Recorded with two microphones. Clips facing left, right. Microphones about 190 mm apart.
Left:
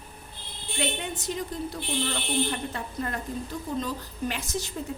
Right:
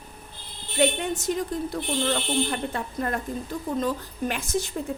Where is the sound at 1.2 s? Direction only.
50° right (ahead or behind).